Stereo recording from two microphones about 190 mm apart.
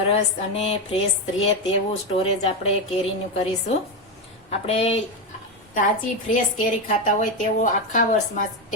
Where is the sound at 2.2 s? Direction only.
30° left (ahead or behind).